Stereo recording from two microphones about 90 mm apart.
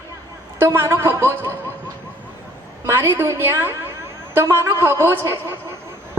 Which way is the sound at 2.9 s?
25° right (ahead or behind).